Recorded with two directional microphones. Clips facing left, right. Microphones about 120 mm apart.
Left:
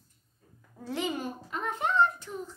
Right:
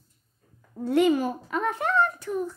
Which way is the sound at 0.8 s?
65° right (ahead or behind).